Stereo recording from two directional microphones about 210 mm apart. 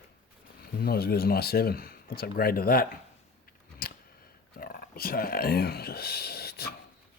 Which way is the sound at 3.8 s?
45° left (ahead or behind).